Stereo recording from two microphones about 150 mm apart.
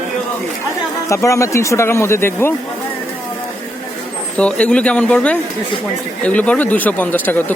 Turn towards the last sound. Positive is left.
turn(degrees=15)  # may be behind; listen again after turning